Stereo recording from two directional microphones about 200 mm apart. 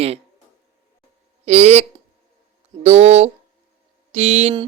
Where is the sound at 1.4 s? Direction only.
35° right (ahead or behind).